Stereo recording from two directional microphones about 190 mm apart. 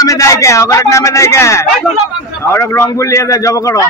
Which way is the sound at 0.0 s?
15° left (ahead or behind).